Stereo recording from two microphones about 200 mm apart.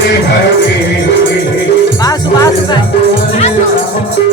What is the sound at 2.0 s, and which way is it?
Speech, 20° left (ahead or behind).